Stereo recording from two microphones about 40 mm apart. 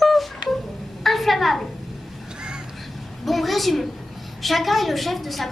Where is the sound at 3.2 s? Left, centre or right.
Centre.